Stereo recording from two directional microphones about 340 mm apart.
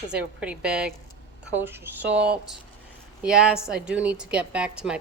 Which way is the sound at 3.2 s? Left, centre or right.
Centre.